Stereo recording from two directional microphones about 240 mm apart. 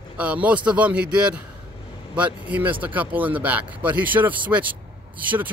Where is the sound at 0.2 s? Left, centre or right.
Centre.